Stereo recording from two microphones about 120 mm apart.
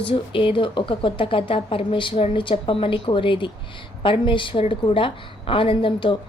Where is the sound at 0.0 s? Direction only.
45° left (ahead or behind).